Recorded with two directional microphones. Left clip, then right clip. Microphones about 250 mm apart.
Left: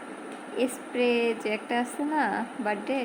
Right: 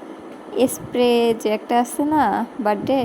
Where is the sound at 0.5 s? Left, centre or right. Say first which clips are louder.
Right 9 dB; right.